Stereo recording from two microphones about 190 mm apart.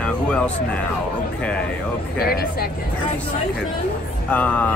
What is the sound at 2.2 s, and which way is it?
Speech, 55° left (ahead or behind).